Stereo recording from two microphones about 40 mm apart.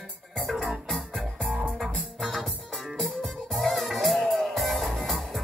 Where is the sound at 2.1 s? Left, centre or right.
Centre.